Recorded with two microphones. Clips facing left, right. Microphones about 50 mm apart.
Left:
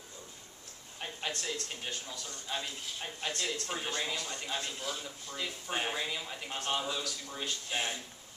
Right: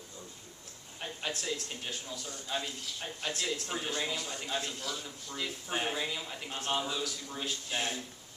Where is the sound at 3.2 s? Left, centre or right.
Centre.